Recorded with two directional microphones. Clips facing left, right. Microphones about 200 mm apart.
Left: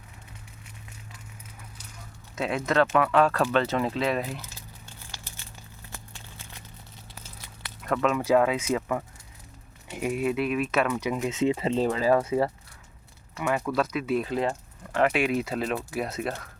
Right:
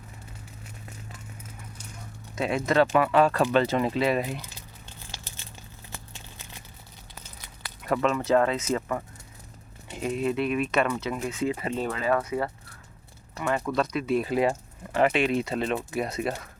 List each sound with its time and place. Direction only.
2.3 s speech: centre (ahead or behind)
7.4 s a sound: centre (ahead or behind)
8.1 s speech: 10° left (ahead or behind)
11.0 s speech: 20° left (ahead or behind)
13.7 s speech: 5° left (ahead or behind)